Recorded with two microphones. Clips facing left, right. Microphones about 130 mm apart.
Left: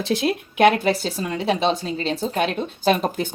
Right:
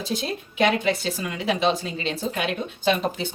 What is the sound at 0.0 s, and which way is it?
Speech, 65° left (ahead or behind).